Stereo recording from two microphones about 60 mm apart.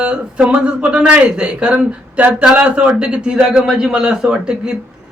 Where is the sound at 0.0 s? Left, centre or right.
Centre.